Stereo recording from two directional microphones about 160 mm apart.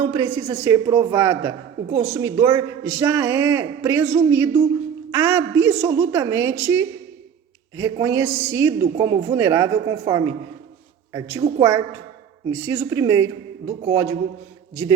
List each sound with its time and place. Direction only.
0.0 s a man's voice: 15° right (ahead or behind)